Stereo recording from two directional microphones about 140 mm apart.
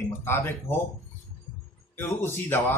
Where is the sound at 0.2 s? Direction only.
20° left (ahead or behind).